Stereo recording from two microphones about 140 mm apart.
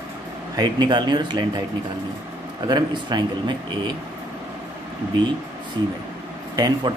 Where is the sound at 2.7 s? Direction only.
30° right (ahead or behind).